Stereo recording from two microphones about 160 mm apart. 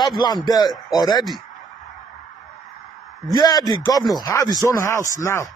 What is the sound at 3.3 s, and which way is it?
Speech, 25° left (ahead or behind).